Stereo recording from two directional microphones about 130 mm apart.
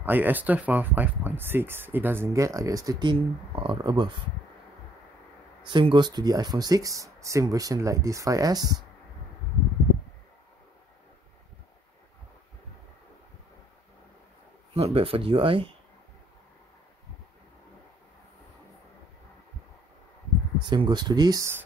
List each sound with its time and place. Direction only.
0.0 s speech: 15° right (ahead or behind); by 4.1 s 35° right (ahead or behind)
5.6 s speech: 35° right (ahead or behind)
14.7 s speech: 50° right (ahead or behind)
20.6 s speech: 35° right (ahead or behind)